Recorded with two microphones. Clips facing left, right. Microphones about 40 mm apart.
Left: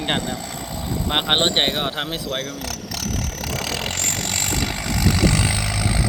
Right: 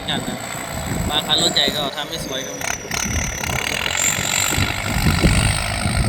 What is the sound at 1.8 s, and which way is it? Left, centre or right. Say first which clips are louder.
Speech: even; left.